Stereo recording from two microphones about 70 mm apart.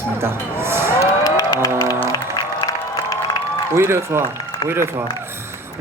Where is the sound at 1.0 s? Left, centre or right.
Left.